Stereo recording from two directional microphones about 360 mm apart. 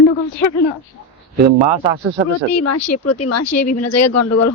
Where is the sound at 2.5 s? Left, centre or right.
Left.